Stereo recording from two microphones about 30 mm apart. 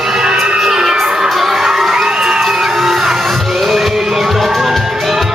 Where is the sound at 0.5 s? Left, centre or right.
Centre.